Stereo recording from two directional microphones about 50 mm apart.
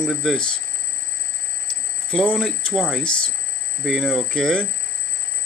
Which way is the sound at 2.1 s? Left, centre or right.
Centre.